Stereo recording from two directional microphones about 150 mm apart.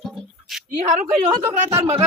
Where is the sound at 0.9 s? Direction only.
55° right (ahead or behind).